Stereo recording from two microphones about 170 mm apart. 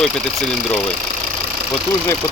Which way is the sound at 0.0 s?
Centre (ahead or behind).